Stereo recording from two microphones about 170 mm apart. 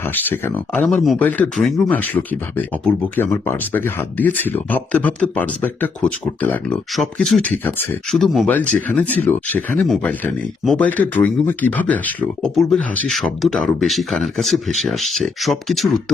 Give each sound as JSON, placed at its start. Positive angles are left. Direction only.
{"t": 0.0, "sound": "speech", "side_deg": 10}
{"t": 8.1, "sound": "speech", "side_deg": 0}